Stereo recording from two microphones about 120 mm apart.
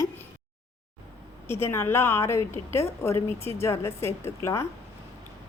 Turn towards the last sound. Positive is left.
turn(degrees=25)  # may be behind; listen again after turning